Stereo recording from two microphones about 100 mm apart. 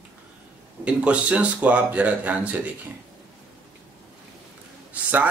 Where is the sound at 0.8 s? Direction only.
10° right (ahead or behind).